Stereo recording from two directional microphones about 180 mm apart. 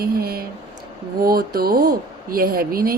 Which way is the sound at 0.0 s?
55° right (ahead or behind).